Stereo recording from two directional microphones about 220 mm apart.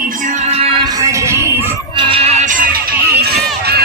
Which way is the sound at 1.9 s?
25° right (ahead or behind).